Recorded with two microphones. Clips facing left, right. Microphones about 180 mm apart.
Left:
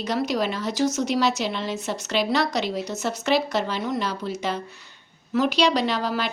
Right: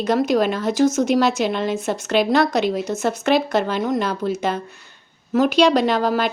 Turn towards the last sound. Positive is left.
turn(degrees=-50)  # may be behind; listen again after turning